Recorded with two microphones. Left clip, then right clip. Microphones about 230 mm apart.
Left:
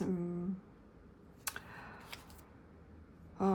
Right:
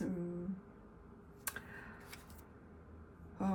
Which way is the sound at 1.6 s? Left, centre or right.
Centre.